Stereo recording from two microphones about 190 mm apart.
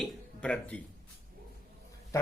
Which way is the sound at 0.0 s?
5° left (ahead or behind).